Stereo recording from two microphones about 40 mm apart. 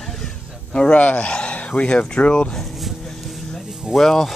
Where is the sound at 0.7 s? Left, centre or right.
Left.